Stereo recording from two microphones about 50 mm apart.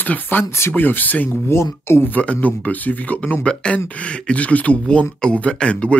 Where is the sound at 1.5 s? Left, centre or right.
Left.